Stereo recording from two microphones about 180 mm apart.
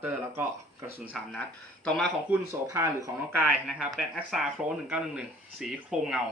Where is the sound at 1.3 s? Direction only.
5° left (ahead or behind).